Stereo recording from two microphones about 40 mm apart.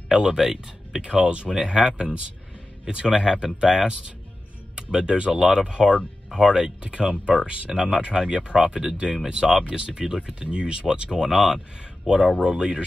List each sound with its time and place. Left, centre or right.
0.1 s speech: centre
1.0 s speech: right